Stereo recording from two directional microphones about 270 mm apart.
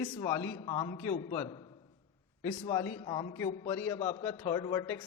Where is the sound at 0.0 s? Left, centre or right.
Centre.